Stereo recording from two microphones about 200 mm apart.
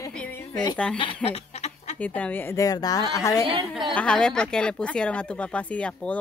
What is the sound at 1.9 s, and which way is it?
A woman's voice, 5° left (ahead or behind).